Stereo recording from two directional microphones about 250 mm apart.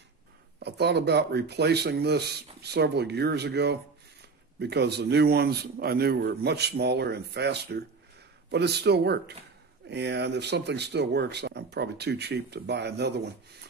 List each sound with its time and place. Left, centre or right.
0.6 s speech: right